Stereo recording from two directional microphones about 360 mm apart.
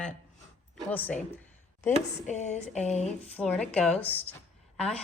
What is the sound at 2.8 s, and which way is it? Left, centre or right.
Speech, centre.